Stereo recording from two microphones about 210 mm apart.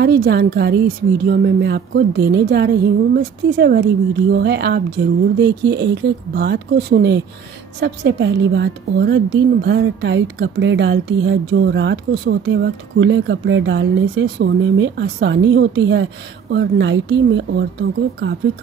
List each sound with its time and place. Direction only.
0.0 s a woman's voice: 50° right (ahead or behind)